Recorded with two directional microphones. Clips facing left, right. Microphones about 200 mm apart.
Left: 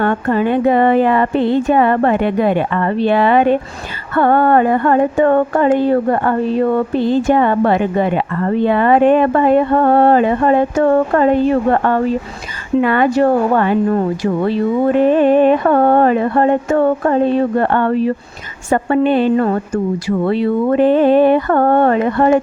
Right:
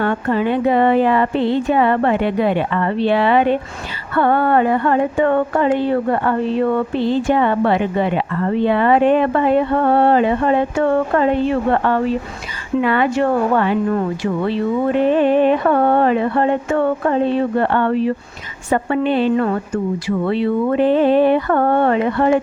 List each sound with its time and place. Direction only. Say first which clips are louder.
0.0 s speech: left 3 dB; 50° left (ahead or behind)